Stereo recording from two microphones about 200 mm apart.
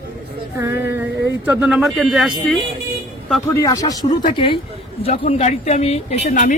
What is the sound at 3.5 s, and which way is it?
Speech, 15° left (ahead or behind).